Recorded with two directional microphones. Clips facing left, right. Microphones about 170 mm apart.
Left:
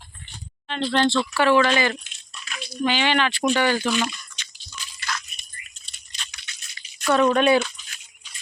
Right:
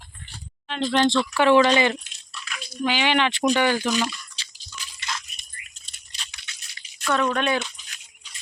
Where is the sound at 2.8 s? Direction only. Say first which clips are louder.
Even; 10° right (ahead or behind).